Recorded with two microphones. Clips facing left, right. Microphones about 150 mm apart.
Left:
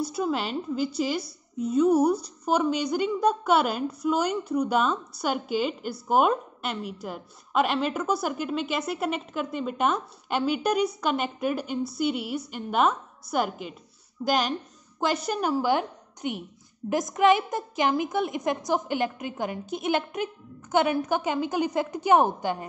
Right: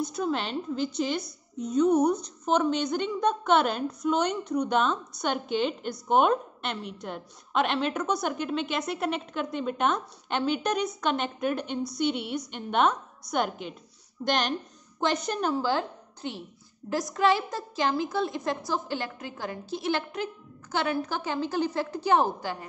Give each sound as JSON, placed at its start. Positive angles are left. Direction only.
{"t": 0.0, "sound": "a woman's voice", "side_deg": 5}